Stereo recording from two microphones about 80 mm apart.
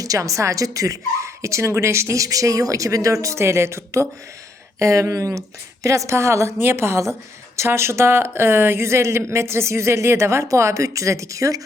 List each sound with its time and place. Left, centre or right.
0.0 s a woman's voice: right